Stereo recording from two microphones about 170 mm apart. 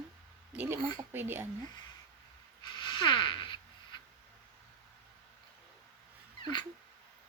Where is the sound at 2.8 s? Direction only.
30° left (ahead or behind).